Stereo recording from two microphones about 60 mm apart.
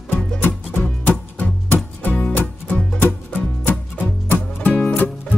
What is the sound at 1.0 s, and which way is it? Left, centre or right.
Music, left.